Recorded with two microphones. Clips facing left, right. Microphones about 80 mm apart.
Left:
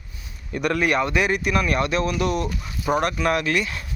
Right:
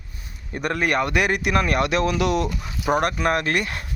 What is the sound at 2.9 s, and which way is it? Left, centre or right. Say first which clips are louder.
Speech: right 1 dB; right.